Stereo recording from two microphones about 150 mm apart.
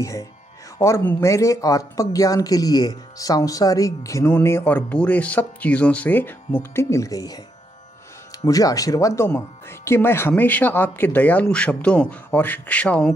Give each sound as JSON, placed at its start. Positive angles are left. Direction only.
{"t": 0.0, "sound": "speech", "side_deg": 20}
{"t": 8.4, "sound": "speech", "side_deg": 25}